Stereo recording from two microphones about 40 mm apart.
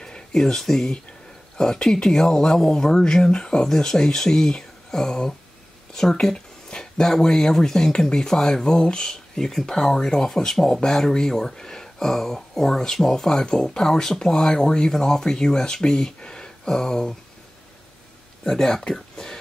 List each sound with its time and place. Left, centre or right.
0.0 s speech: centre
18.4 s speech: centre